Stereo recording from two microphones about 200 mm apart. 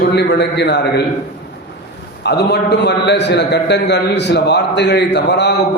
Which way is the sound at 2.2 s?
55° left (ahead or behind).